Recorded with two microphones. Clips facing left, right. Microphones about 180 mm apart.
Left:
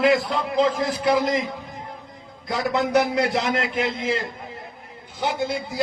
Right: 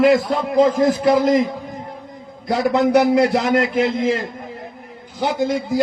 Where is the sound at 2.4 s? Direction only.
35° right (ahead or behind).